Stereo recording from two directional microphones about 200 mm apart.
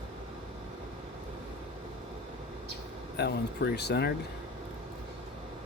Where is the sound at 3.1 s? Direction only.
55° left (ahead or behind).